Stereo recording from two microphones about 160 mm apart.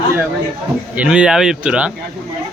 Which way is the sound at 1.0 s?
5° right (ahead or behind).